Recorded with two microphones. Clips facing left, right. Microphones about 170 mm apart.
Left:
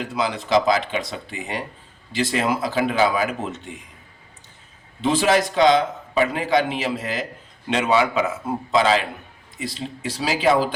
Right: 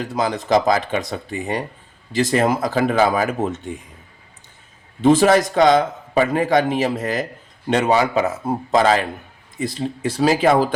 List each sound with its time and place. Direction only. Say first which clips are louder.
0.0 s a man's voice: right 3 dB; 40° right (ahead or behind)
5.0 s a man's voice: right 5 dB; 50° right (ahead or behind)